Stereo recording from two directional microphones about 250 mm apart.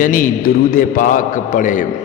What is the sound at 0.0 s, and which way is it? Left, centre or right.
A man's voice, left.